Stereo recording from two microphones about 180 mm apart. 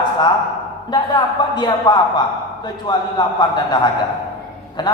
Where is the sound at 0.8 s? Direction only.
25° left (ahead or behind).